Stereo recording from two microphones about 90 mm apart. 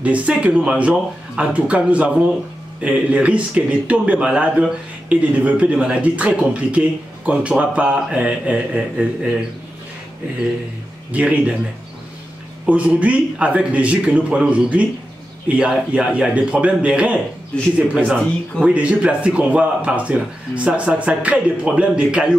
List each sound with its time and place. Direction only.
0.0 s a man's voice: 15° right (ahead or behind)
11.1 s a man's voice: 15° right (ahead or behind)
12.6 s a man's voice: 15° right (ahead or behind)